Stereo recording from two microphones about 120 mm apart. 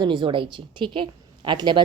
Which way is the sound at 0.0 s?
40° right (ahead or behind).